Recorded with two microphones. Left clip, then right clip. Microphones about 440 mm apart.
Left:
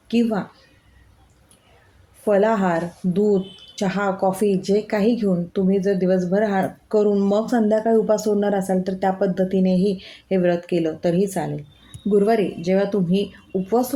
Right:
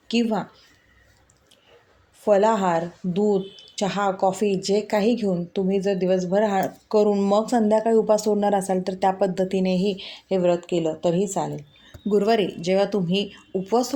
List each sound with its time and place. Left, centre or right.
0.1 s speech: left
2.2 s speech: left